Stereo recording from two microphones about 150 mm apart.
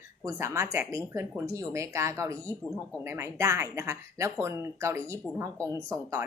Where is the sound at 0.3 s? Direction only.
20° right (ahead or behind).